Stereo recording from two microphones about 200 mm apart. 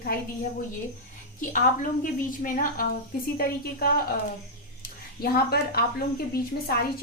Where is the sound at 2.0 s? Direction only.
45° left (ahead or behind).